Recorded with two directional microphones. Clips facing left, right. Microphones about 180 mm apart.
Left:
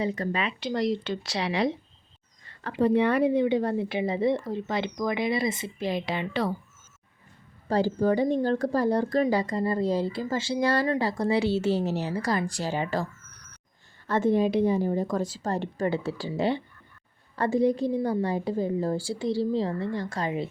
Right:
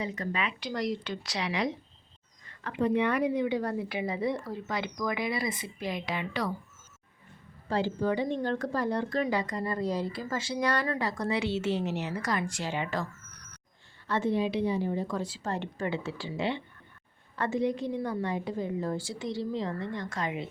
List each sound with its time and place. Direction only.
0.0 s a woman's voice: 30° left (ahead or behind)
7.7 s speech: 40° left (ahead or behind)
14.1 s a woman's voice: 45° left (ahead or behind)